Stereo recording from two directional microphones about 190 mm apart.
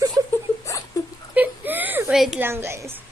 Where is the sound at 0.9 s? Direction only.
15° left (ahead or behind).